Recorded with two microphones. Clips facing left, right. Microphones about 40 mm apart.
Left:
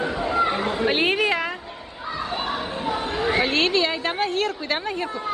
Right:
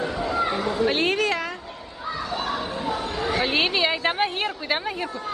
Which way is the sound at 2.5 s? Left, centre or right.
Left.